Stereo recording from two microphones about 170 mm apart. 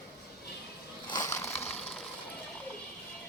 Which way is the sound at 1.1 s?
20° left (ahead or behind).